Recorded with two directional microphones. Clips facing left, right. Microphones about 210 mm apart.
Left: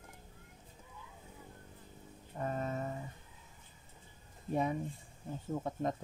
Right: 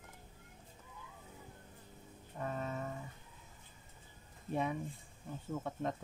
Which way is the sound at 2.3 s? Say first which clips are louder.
Left 3 dB; 40° left (ahead or behind).